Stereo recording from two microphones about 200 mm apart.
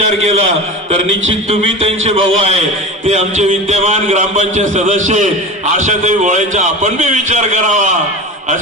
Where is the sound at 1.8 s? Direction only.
30° right (ahead or behind).